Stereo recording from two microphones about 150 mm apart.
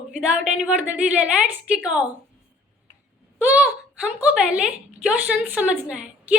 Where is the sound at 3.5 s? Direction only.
5° right (ahead or behind).